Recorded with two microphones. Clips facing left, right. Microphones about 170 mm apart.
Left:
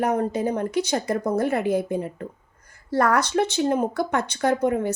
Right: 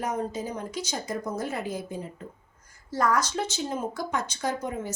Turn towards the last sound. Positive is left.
turn(degrees=65)  # may be behind; listen again after turning